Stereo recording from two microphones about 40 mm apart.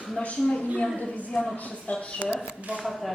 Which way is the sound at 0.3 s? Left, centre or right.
Centre.